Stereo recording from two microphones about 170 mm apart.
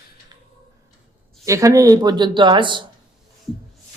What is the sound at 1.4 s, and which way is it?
Speech, 20° right (ahead or behind).